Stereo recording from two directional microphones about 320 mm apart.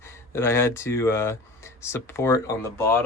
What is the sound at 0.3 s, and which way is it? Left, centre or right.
Speech, centre.